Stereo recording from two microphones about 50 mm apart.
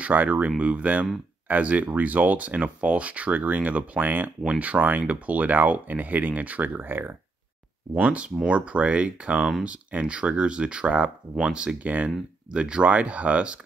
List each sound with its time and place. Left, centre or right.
0.0 s speech: right
7.9 s speech: right
11.8 s speech: right
12.4 s speech: centre